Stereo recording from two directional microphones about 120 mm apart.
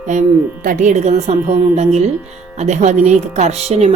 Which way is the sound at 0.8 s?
80° right.